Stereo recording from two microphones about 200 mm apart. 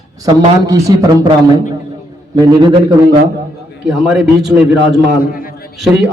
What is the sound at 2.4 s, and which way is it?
Speech, 20° right (ahead or behind).